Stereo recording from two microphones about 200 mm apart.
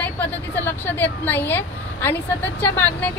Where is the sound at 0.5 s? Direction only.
10° left (ahead or behind).